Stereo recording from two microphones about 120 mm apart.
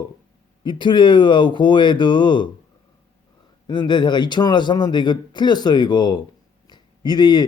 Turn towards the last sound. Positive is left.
turn(degrees=40)  # may be behind; listen again after turning